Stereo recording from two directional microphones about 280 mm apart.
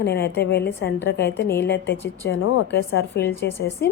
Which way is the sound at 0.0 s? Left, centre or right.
Left.